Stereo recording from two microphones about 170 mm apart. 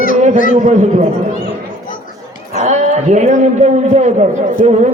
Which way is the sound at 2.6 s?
45° right (ahead or behind).